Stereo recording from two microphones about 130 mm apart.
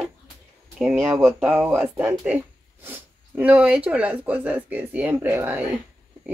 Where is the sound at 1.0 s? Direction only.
15° right (ahead or behind).